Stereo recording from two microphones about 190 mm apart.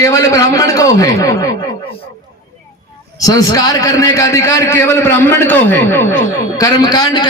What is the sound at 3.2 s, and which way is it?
A man's voice, 20° left (ahead or behind).